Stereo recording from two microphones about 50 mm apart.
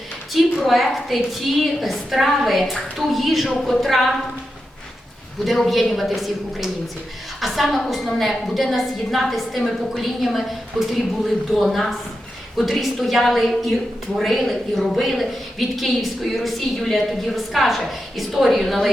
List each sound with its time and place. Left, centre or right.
0.6 s a woman's voice: centre
5.5 s a woman's voice: centre